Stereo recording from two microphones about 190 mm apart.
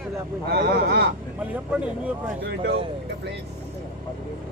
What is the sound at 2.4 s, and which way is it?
Speech, 60° right (ahead or behind).